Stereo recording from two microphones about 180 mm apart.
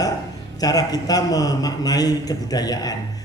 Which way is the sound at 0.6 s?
20° left (ahead or behind).